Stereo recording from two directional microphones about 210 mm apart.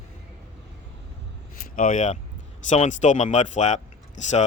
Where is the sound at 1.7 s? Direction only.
40° left (ahead or behind).